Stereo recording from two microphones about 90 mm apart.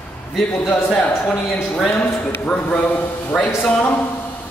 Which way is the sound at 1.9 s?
25° left (ahead or behind).